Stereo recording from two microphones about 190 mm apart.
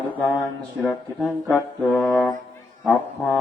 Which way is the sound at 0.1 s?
10° left (ahead or behind).